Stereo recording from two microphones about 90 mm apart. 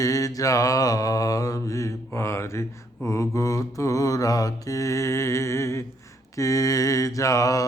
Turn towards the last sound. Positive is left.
turn(degrees=40)  # may be behind; listen again after turning